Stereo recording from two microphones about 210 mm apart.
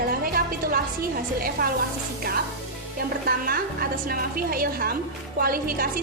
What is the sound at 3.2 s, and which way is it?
A woman's voice, 45° right (ahead or behind).